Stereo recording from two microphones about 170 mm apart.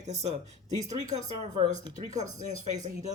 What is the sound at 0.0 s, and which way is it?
Speech, 40° right (ahead or behind).